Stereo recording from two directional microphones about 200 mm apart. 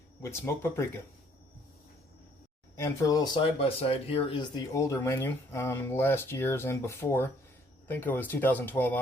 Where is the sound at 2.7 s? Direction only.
15° left (ahead or behind).